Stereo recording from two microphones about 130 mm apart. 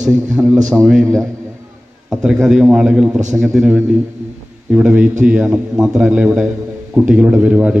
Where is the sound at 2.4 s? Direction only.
5° right (ahead or behind).